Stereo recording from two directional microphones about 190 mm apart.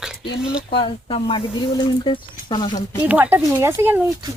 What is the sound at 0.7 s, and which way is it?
Speech, 25° left (ahead or behind).